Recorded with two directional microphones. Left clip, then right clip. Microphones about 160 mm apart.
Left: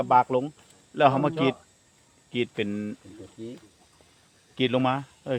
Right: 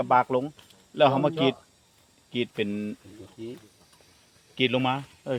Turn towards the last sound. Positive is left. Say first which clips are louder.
# left 1 dB
turn(degrees=15)  # may be behind; listen again after turning